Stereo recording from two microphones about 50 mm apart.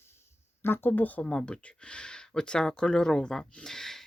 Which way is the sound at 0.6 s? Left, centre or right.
Left.